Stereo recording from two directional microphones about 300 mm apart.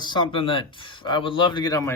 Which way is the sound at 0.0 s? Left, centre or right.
Centre.